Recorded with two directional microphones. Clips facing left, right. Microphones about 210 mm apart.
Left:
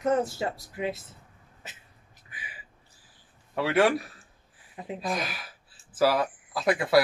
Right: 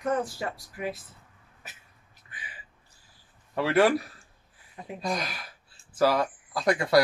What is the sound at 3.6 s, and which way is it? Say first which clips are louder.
Speech: right 1 dB; centre (ahead or behind).